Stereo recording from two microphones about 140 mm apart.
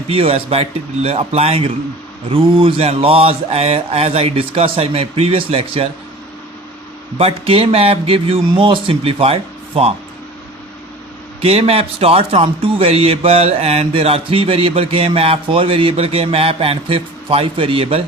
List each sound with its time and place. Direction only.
0.1 s speech: 40° right (ahead or behind)
7.2 s speech: 45° right (ahead or behind)
11.4 s speech: 45° right (ahead or behind)